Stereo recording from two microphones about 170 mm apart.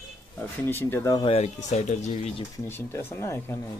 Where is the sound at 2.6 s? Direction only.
15° left (ahead or behind).